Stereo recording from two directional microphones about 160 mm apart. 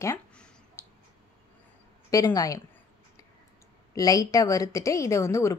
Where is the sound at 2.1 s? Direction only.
20° left (ahead or behind).